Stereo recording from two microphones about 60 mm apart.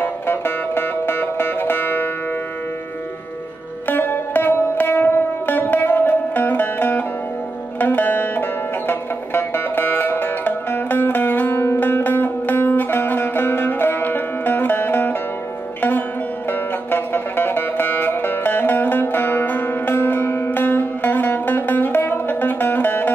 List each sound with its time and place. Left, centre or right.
0.0 s music: left
3.8 s music: left
16.4 s music: left